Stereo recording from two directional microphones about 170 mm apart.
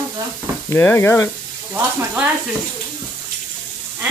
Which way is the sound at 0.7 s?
15° left (ahead or behind).